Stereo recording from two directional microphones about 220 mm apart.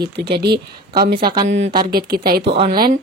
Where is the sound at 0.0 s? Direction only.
45° right (ahead or behind).